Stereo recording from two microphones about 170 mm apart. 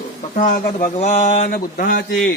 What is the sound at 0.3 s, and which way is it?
Speech, 45° left (ahead or behind).